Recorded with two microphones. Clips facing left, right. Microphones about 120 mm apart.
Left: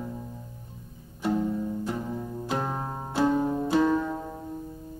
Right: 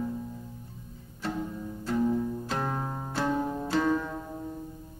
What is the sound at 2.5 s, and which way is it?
Music, 10° left (ahead or behind).